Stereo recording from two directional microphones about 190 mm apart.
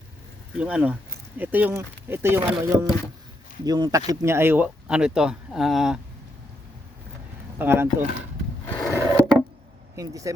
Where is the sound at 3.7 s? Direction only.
20° right (ahead or behind); by 6.0 s 5° right (ahead or behind).